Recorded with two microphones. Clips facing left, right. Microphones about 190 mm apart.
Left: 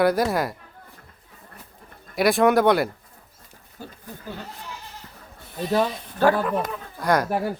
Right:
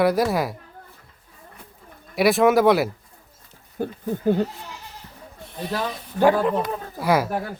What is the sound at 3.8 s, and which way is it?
Speech, 55° right (ahead or behind).